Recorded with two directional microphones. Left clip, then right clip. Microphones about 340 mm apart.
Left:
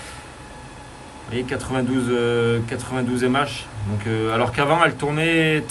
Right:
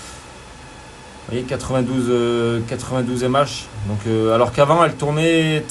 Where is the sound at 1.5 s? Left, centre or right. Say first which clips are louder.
Right 3 dB; centre.